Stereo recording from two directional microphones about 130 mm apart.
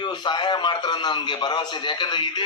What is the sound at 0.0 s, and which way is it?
A man's voice, 35° left (ahead or behind).